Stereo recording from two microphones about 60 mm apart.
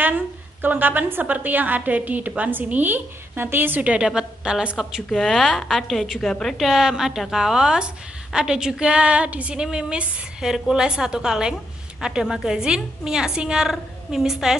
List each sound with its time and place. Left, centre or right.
0.0 s a woman's voice: right
3.8 s a woman's voice: centre